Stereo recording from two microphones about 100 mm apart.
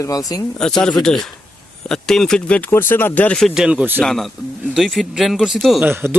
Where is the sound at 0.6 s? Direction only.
5° left (ahead or behind).